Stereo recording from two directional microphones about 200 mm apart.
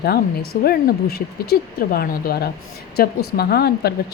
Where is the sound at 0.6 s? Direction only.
50° left (ahead or behind).